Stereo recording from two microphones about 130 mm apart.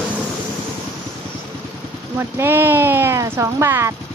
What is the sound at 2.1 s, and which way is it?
Speech, 15° right (ahead or behind).